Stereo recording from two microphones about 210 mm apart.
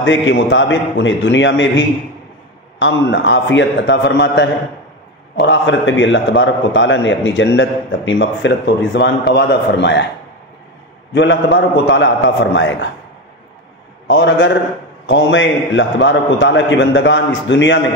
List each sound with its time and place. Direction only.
0.3 s a man's voice: 60° left (ahead or behind)
11.1 s a man's voice: 60° left (ahead or behind)
14.0 s a man's voice: 60° left (ahead or behind)